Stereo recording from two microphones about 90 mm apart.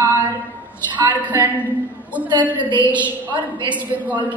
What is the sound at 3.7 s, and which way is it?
Speech, 15° right (ahead or behind).